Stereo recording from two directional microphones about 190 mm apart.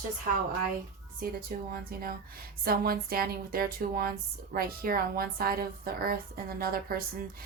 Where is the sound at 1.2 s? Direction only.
50° right (ahead or behind).